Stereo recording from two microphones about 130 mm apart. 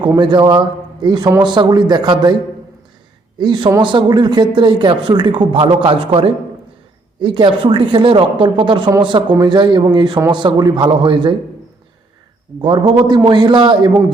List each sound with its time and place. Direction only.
0.0 s speech: 35° right (ahead or behind)
3.3 s speech: 35° right (ahead or behind)
13.1 s speech: 35° right (ahead or behind)